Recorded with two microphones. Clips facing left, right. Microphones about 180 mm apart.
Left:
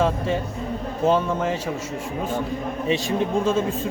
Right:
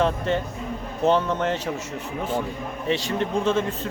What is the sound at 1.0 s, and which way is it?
Speech, 10° left (ahead or behind).